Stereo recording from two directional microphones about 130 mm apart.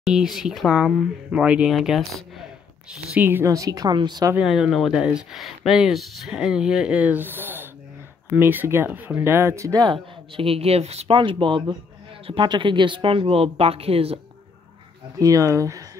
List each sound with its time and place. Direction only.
0.0 s speech: 5° right (ahead or behind)
3.2 s a woman's voice: 15° right (ahead or behind); by 4.3 s 35° right (ahead or behind)
4.4 s speech: 5° right (ahead or behind); by 9.9 s 30° right (ahead or behind)
9.9 s a woman's voice: 45° right (ahead or behind)
15.1 s a woman's voice: 25° right (ahead or behind)